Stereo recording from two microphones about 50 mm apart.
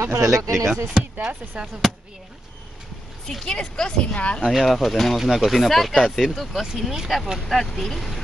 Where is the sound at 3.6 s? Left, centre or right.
Centre.